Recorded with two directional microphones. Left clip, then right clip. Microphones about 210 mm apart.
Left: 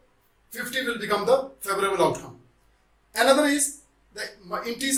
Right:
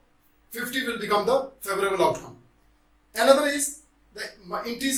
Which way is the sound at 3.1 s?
30° left (ahead or behind).